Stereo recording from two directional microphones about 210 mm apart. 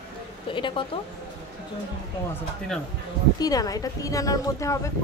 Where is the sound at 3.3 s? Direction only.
15° left (ahead or behind).